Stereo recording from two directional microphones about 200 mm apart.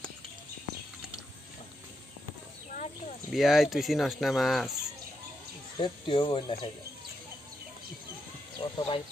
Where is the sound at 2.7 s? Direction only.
35° left (ahead or behind).